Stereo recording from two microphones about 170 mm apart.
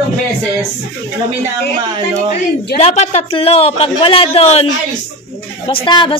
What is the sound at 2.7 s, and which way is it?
A man's voice, 40° left (ahead or behind).